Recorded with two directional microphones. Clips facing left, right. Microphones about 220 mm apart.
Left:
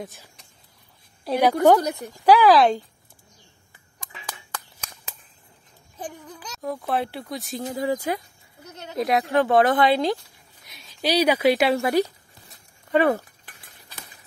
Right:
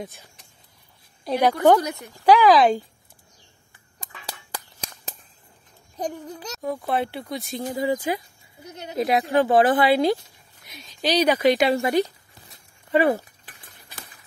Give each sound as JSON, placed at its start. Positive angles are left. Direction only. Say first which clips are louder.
{"t": 0.0, "sound": "a woman's voice", "louder": "right 1 dB", "side_deg": 0}
{"t": 4.3, "sound": "a sound", "louder": "right 1 dB", "side_deg": -35}
{"t": 6.6, "sound": "speech", "louder": "right 1 dB", "side_deg": 0}
{"t": 8.6, "sound": "speech", "louder": "right 3 dB", "side_deg": -15}
{"t": 8.9, "sound": "speech", "louder": "right 1 dB", "side_deg": 0}
{"t": 10.7, "sound": "speech", "louder": "even", "side_deg": 10}
{"t": 12.9, "sound": "speech", "louder": "even", "side_deg": -10}